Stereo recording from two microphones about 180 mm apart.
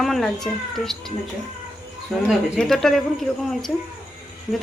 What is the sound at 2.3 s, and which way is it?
Speech, centre (ahead or behind).